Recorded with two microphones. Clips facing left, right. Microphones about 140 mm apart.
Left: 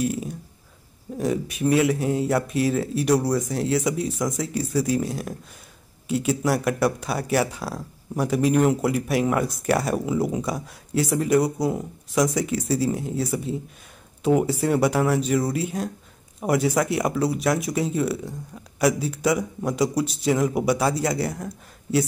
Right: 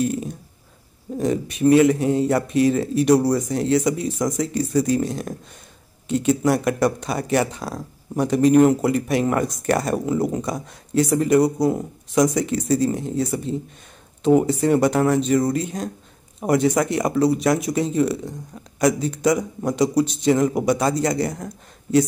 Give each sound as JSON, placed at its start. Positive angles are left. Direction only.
{"t": 0.0, "sound": "speech", "side_deg": 5}